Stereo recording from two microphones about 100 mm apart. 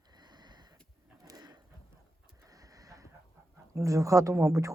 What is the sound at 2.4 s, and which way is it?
Vehicle, 35° right (ahead or behind).